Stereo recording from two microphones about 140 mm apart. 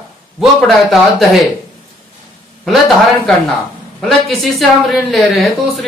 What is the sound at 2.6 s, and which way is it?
A woman's voice, centre (ahead or behind).